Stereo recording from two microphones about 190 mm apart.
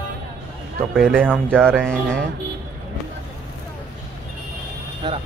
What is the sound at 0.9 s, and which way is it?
Speech, centre (ahead or behind).